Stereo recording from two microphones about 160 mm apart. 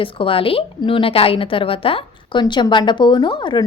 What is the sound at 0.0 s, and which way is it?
A woman's voice, 35° left (ahead or behind).